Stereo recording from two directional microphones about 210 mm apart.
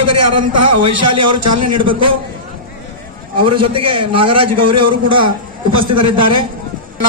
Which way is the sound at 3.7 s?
25° right (ahead or behind).